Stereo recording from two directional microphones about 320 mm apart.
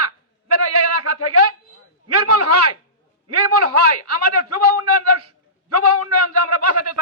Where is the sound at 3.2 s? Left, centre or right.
Right.